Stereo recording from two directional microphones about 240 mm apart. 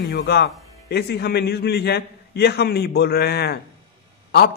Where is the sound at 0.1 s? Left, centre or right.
Left.